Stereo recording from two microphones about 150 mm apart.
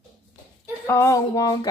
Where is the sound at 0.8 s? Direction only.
20° left (ahead or behind).